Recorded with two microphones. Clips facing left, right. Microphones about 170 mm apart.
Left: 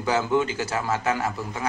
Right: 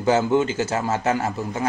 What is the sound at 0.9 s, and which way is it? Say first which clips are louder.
Speech: right 3 dB; 40° right (ahead or behind).